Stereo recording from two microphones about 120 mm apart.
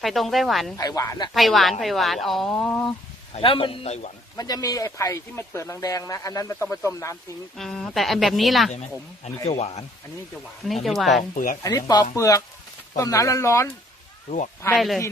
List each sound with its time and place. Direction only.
0.0 s speech: centre (ahead or behind)
0.8 s speech: 30° left (ahead or behind)
1.3 s speech: centre (ahead or behind)
3.3 s a man's voice: 50° left (ahead or behind); by 4.1 s 65° left (ahead or behind)
4.4 s speech: 30° left (ahead or behind)
7.5 s speech: 5° left (ahead or behind)
10.8 s speech: centre (ahead or behind)
11.6 s speech: 35° left (ahead or behind)
14.3 s speech: 80° left
14.8 s speech: centre (ahead or behind)